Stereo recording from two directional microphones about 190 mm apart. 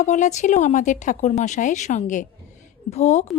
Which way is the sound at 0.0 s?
40° left (ahead or behind).